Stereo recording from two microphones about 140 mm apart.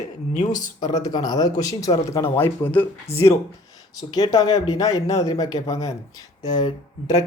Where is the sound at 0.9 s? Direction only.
25° left (ahead or behind).